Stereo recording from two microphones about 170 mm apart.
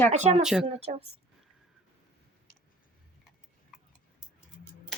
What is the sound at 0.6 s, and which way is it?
Speech, 35° right (ahead or behind).